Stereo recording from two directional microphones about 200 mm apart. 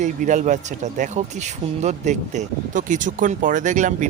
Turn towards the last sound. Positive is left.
turn(degrees=-40)  # may be behind; listen again after turning